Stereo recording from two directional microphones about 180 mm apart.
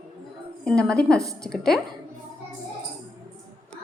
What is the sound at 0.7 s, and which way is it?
A woman's voice, 5° left (ahead or behind).